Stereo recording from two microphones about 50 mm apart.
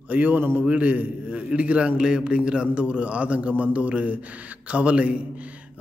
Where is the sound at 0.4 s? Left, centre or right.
Right.